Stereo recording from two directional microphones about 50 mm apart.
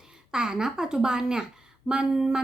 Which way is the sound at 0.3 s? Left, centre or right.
Centre.